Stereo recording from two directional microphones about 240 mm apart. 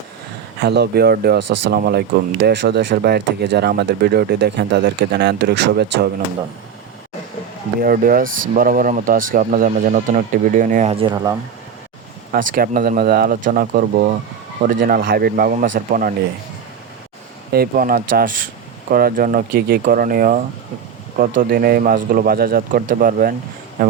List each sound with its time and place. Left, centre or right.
0.6 s speech: right
1.4 s speech: right
1.6 s speech: right
7.8 s speech: right; by 11.3 s centre
12.3 s speech: right
17.5 s speech: right